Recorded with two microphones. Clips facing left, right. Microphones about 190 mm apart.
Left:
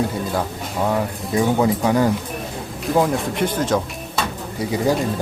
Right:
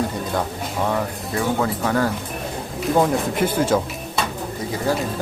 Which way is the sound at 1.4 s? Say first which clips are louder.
Left 4 dB; 15° left (ahead or behind).